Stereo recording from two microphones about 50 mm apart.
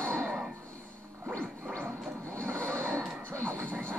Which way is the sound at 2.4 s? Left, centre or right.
Left.